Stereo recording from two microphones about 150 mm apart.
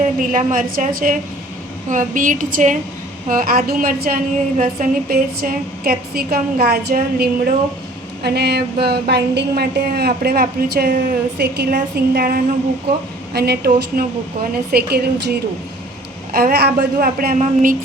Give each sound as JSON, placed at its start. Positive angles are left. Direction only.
{"t": 0.0, "sound": "a woman's voice", "side_deg": -65}
{"t": 3.2, "sound": "a woman's voice", "side_deg": -70}
{"t": 16.3, "sound": "a woman's voice", "side_deg": -85}
{"t": 17.4, "sound": "a woman's voice", "side_deg": -60}